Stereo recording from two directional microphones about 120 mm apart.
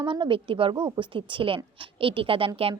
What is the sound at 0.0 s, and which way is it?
A woman's voice, 40° right (ahead or behind).